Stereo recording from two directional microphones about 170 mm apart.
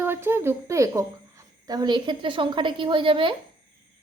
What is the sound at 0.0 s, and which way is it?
A woman's voice, 15° right (ahead or behind).